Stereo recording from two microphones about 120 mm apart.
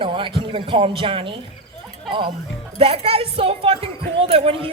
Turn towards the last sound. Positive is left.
turn(degrees=-55)  # may be behind; listen again after turning